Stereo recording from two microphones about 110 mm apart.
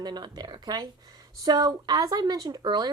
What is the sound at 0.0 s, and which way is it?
Speech, 40° right (ahead or behind).